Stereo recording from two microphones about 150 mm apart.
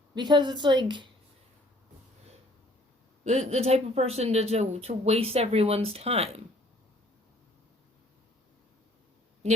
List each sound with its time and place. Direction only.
0.1 s a woman's voice: 30° right (ahead or behind)
3.2 s speech: 45° right (ahead or behind)